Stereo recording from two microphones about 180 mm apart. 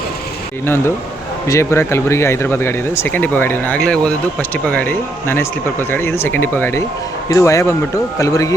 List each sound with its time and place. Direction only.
1.5 s speech: 15° left (ahead or behind)